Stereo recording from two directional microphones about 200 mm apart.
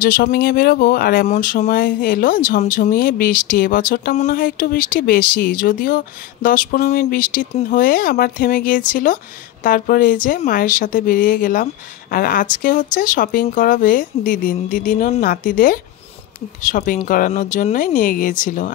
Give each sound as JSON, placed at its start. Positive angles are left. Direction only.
{"t": 0.0, "sound": "speech", "side_deg": 50}